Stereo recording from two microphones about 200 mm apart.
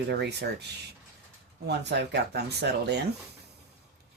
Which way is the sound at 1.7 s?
55° right (ahead or behind).